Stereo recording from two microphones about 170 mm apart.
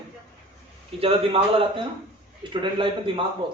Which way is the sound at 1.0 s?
35° right (ahead or behind).